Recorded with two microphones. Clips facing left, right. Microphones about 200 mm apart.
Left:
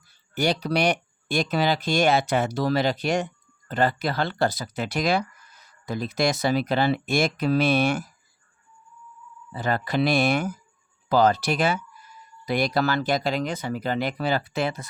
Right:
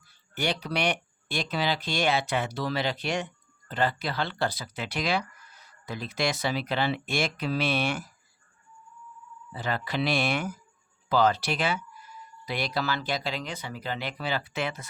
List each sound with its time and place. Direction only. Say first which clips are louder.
0.3 s speech: left 6 dB; 40° left (ahead or behind)
9.5 s speech: left 5 dB; 45° left (ahead or behind)